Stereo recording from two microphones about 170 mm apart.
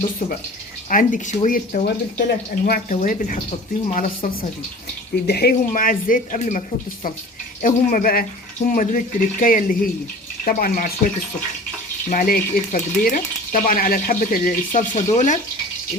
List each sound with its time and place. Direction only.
0.9 s speech: 50° left (ahead or behind)
5.2 s speech: 65° left (ahead or behind); by 6.6 s 50° left (ahead or behind)
7.6 s speech: 50° left (ahead or behind)
12.1 s speech: 55° left (ahead or behind)